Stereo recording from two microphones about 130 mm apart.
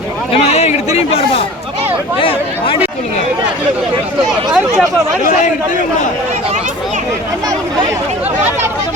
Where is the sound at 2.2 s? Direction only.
45° left (ahead or behind).